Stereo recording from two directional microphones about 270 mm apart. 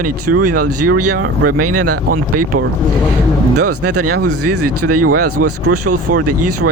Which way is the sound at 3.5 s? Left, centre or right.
Right.